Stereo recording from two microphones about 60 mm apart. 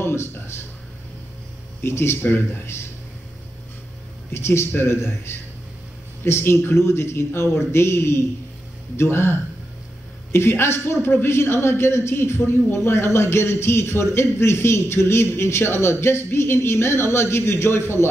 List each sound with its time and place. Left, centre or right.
0.0 s speech: left
1.8 s a man's voice: left
4.3 s a man's voice: left